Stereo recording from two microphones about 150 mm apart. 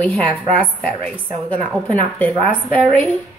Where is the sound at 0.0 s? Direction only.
10° left (ahead or behind).